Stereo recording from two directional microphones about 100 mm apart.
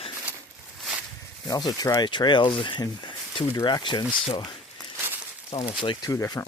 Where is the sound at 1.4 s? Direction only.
40° left (ahead or behind).